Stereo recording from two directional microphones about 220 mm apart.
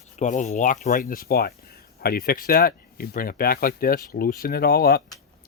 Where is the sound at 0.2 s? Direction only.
35° left (ahead or behind).